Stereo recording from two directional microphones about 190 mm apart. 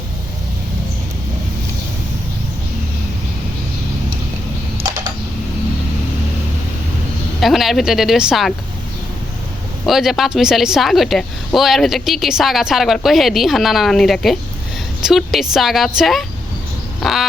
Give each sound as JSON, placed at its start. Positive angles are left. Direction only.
{"t": 7.4, "sound": "a woman's voice", "side_deg": 0}
{"t": 9.8, "sound": "a woman's voice", "side_deg": 0}